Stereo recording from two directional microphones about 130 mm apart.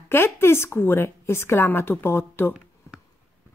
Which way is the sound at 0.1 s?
20° left (ahead or behind).